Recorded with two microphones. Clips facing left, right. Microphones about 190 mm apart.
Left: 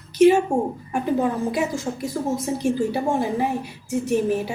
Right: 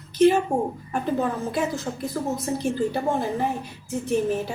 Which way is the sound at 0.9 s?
10° left (ahead or behind).